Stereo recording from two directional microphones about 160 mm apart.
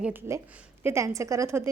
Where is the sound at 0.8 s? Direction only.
20° right (ahead or behind).